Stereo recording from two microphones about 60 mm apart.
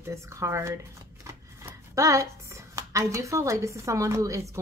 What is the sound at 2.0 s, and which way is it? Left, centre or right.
A woman's voice, right.